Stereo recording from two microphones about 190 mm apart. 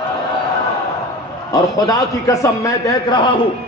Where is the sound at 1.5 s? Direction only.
20° left (ahead or behind).